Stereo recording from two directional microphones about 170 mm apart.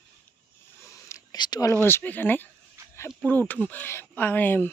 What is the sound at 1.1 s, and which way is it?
Whispering, 20° left (ahead or behind).